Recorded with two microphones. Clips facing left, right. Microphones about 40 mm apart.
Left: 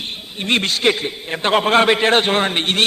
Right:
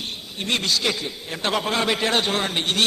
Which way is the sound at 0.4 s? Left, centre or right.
Left.